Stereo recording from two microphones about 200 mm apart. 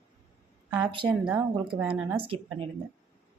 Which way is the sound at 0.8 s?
25° right (ahead or behind).